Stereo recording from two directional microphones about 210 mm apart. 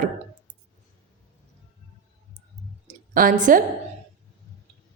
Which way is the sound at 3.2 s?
40° right (ahead or behind).